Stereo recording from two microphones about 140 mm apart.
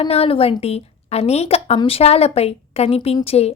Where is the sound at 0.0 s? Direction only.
45° left (ahead or behind).